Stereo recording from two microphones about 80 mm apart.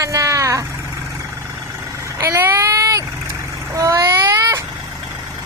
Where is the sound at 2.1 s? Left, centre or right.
Right.